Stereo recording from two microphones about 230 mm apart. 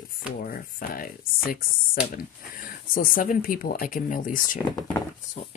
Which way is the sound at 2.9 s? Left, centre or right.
Left.